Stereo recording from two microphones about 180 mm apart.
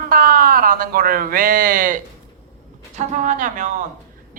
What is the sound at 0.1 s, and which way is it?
A woman's voice, 55° right (ahead or behind).